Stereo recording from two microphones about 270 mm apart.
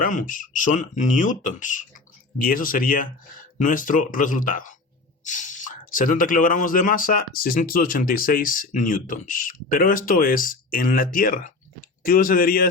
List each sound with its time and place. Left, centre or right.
0.0 s speech: left